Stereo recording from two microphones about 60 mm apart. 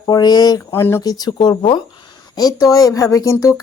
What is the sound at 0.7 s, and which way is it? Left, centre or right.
Speech, left.